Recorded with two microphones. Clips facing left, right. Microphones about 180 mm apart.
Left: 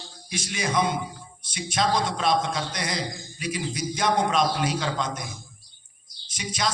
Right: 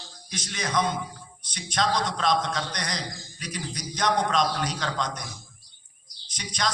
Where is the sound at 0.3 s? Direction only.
10° left (ahead or behind).